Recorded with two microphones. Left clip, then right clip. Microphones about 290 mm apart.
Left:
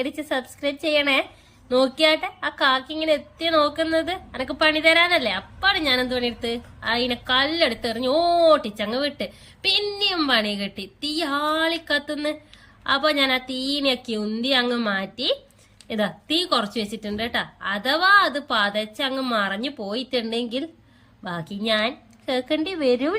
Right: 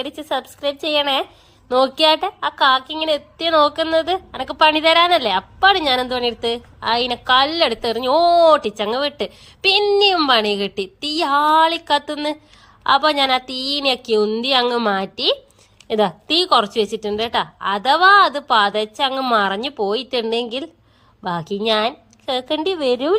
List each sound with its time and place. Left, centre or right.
0.0 s a woman's voice: centre